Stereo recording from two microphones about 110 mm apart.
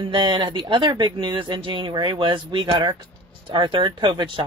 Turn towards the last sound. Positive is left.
turn(degrees=-45)  # may be behind; listen again after turning